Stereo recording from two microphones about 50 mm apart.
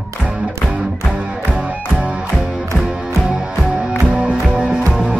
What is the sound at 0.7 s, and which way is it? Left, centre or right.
Music, right.